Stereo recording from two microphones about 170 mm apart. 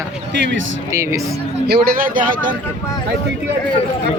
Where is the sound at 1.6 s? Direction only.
65° right (ahead or behind).